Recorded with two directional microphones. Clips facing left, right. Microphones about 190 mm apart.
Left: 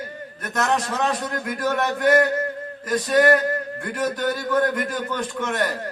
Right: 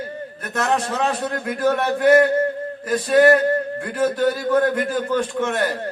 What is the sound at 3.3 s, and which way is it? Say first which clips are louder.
A man's voice: right 3 dB; 30° right (ahead or behind).